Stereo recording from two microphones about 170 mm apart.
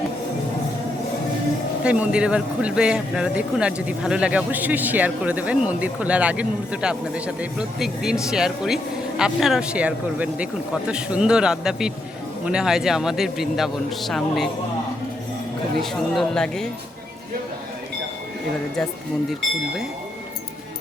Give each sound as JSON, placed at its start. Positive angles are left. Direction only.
{"t": 1.8, "sound": "a man's voice", "side_deg": -5}
{"t": 15.8, "sound": "a man's voice", "side_deg": 5}